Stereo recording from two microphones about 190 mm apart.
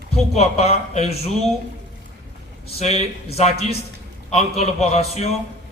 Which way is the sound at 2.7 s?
35° left (ahead or behind).